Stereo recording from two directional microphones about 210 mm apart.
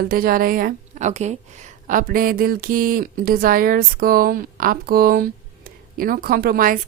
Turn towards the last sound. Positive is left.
turn(degrees=-45)  # may be behind; listen again after turning